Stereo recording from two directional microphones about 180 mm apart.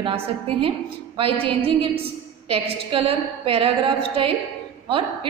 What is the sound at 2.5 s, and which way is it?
A woman's voice, 30° right (ahead or behind).